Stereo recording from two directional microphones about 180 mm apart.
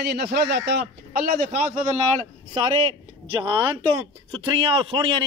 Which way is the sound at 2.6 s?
25° right (ahead or behind).